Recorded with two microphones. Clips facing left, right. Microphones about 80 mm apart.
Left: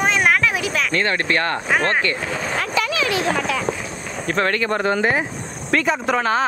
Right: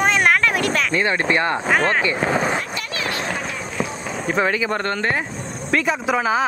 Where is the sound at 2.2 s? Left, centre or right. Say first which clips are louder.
Right 6 dB; right.